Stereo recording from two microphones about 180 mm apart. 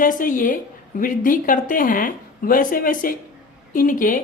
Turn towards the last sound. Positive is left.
turn(degrees=50)  # may be behind; listen again after turning